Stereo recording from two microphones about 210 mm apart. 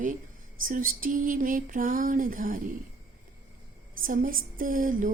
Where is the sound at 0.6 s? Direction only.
40° right (ahead or behind).